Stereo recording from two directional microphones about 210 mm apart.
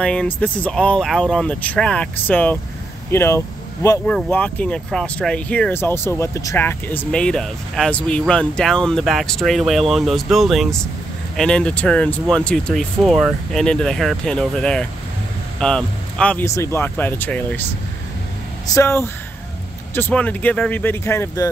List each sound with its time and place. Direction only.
0.0 s speech: 5° left (ahead or behind)
18.7 s speech: 15° left (ahead or behind)